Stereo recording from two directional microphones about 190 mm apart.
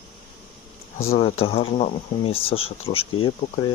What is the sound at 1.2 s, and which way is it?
Speech, 30° left (ahead or behind).